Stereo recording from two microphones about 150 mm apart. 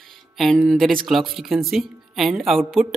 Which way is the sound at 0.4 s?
Centre (ahead or behind).